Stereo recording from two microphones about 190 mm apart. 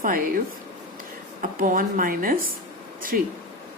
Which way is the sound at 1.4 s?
45° right (ahead or behind).